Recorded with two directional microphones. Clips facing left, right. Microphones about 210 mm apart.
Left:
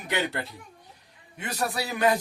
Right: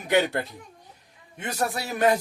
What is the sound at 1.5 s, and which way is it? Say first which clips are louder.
Speech: right 1 dB; 45° right (ahead or behind).